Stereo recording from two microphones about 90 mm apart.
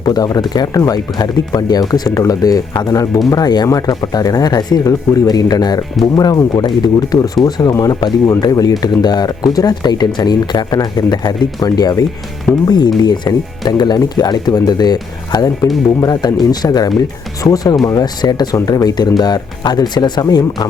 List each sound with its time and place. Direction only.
0.0 s speech: 45° left (ahead or behind)